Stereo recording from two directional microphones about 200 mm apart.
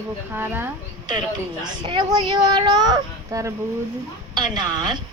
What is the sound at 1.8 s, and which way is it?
A child's voice, 25° right (ahead or behind).